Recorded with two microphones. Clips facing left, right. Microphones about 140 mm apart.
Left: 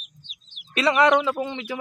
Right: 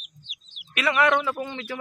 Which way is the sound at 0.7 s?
25° left (ahead or behind).